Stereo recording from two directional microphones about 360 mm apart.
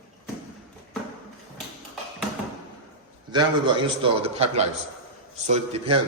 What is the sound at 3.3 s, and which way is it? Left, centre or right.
Speech, centre.